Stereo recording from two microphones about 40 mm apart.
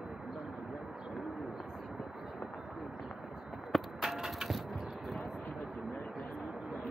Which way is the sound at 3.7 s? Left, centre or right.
Centre.